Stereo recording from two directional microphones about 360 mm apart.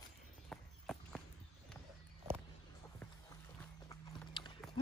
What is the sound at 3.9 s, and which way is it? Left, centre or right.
Clip-clop, centre.